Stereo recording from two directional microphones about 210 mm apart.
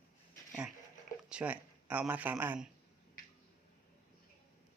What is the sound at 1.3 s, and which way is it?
Speech, 5° right (ahead or behind).